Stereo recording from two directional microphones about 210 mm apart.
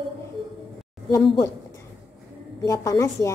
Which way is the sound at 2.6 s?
15° left (ahead or behind).